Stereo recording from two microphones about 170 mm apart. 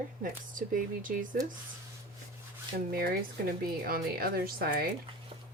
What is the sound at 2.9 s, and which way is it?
A woman's voice, 60° right (ahead or behind).